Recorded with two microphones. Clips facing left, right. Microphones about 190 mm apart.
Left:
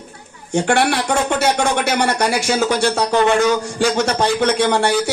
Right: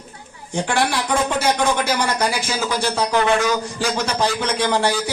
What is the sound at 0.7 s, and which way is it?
A man's voice, 70° left (ahead or behind).